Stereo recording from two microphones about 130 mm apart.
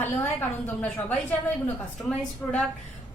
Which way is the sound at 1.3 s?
10° left (ahead or behind).